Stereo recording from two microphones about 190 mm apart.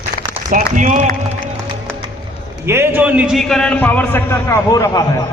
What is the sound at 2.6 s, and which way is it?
A man's voice, 10° right (ahead or behind).